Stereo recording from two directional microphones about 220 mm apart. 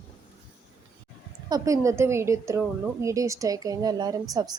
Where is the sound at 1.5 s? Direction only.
15° right (ahead or behind).